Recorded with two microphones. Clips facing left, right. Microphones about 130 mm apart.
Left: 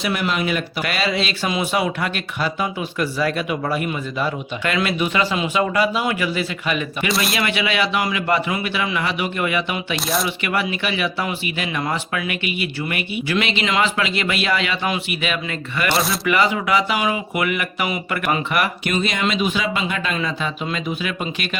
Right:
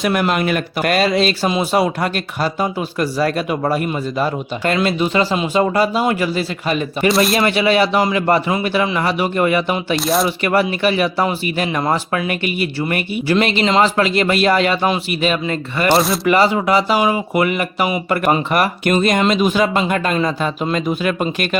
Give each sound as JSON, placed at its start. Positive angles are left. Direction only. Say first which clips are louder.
{"t": 0.0, "sound": "speech", "louder": "right 5 dB", "side_deg": -50}
{"t": 7.1, "sound": "speech", "louder": "right 7 dB", "side_deg": 0}
{"t": 7.3, "sound": "speech", "louder": "right 7 dB", "side_deg": -40}
{"t": 9.9, "sound": "speech", "louder": "right 6 dB", "side_deg": 0}
{"t": 10.2, "sound": "speech", "louder": "right 6 dB", "side_deg": -40}